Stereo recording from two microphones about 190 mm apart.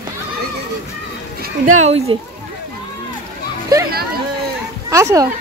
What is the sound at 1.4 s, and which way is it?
Speech, 45° right (ahead or behind).